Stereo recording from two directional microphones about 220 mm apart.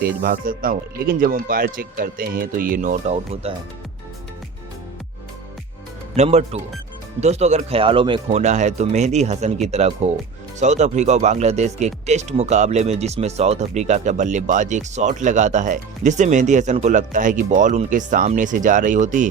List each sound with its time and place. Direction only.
0.0 s speech: 40° right (ahead or behind)
6.1 s speech: 30° right (ahead or behind)